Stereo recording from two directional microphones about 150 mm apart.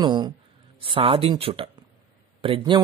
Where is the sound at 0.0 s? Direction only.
30° right (ahead or behind).